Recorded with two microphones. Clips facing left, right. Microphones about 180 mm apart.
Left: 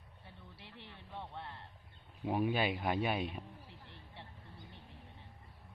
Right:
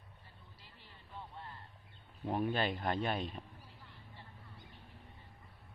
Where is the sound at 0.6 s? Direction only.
70° left (ahead or behind).